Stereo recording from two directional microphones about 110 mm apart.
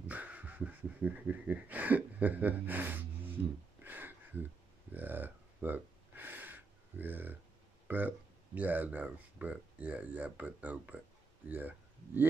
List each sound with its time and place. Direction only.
0.1 s a sound: 15° right (ahead or behind)
4.9 s gasp: 15° right (ahead or behind)
7.9 s speech: 15° right (ahead or behind)